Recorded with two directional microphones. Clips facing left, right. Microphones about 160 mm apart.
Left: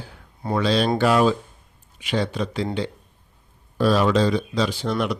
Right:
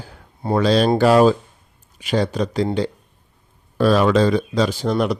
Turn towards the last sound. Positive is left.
turn(degrees=-40)  # may be behind; listen again after turning